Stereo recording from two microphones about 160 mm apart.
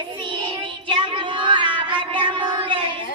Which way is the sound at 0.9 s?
30° right (ahead or behind).